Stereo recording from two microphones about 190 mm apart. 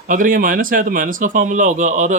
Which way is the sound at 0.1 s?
45° right (ahead or behind).